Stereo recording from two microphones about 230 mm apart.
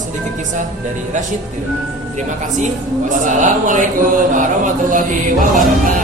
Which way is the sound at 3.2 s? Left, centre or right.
Right.